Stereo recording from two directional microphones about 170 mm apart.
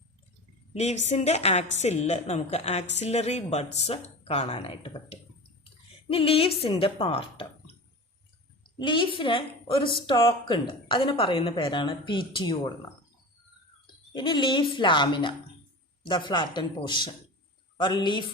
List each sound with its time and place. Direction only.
0.7 s speech: 40° left (ahead or behind)
8.8 s a woman's voice: 30° left (ahead or behind)
14.1 s a woman's voice: 25° left (ahead or behind)